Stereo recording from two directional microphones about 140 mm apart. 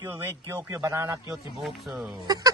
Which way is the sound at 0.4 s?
20° right (ahead or behind).